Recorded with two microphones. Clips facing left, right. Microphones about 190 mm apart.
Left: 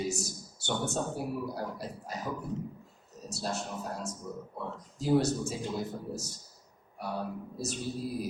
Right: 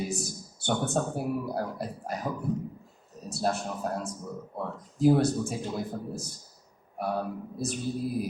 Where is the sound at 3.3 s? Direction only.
55° right (ahead or behind).